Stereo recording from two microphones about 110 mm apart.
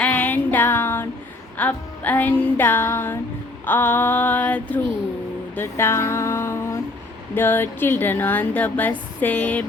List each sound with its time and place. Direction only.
0.0 s music: 15° left (ahead or behind)
1.5 s speech: 15° left (ahead or behind)
5.5 s a sound: 20° left (ahead or behind)
7.3 s speech: 20° left (ahead or behind)